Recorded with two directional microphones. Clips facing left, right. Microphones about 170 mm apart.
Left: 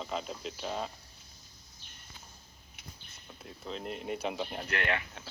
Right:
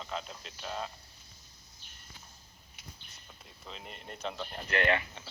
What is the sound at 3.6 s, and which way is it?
Speech, centre (ahead or behind).